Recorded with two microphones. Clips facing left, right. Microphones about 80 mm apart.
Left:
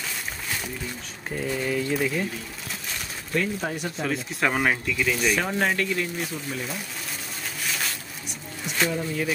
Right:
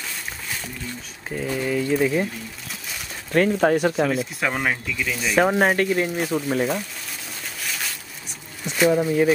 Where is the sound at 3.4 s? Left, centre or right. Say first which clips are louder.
Right 9 dB; right.